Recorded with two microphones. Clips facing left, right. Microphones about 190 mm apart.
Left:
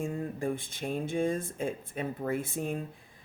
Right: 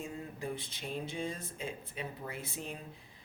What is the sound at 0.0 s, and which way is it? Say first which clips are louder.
Speech: left 8 dB; 50° left (ahead or behind).